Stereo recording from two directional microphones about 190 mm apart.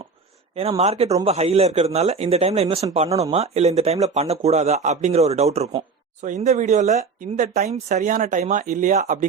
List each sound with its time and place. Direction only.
0.5 s speech: 30° right (ahead or behind)